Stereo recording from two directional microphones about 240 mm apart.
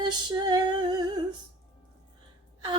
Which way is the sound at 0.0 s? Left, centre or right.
Centre.